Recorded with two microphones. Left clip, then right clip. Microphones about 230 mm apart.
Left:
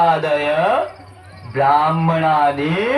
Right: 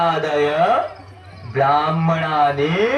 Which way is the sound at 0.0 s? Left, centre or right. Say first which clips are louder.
Left 2 dB; left.